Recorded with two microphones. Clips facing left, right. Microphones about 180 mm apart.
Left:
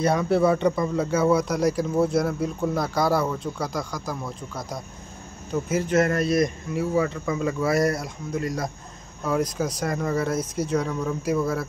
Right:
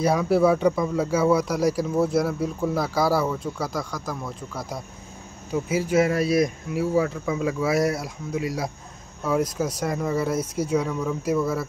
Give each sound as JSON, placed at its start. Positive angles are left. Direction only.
{"t": 0.0, "sound": "speech", "side_deg": -5}